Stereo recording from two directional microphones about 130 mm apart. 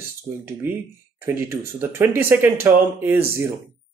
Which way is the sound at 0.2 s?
15° right (ahead or behind).